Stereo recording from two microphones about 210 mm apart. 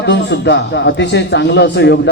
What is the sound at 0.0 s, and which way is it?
A man's voice, 55° left (ahead or behind).